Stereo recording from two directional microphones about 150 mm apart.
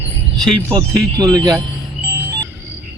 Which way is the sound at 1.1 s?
25° right (ahead or behind).